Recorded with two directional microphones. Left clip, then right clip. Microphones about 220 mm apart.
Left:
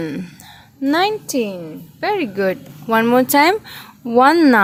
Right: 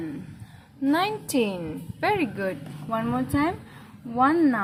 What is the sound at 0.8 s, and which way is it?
Speech, 25° left (ahead or behind).